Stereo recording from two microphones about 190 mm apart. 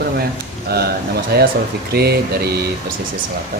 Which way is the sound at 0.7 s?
55° right (ahead or behind).